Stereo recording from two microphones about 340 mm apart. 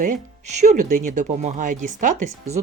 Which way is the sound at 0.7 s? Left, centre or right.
Right.